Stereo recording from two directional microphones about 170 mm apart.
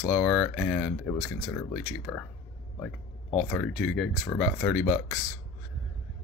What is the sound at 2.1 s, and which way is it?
Speech, 20° left (ahead or behind).